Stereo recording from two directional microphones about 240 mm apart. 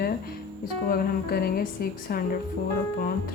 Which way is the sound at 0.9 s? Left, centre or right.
Left.